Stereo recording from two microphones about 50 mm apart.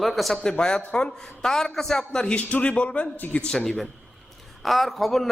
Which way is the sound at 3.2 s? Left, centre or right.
Left.